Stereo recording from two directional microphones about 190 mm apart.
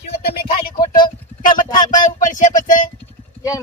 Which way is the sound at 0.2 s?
50° left (ahead or behind).